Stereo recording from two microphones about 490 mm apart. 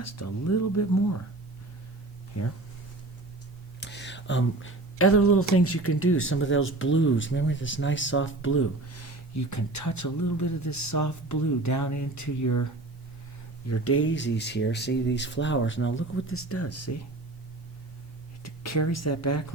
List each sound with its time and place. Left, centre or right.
0.0 s speech: left
2.3 s speech: left
3.8 s speech: left
13.7 s speech: left
18.4 s speech: left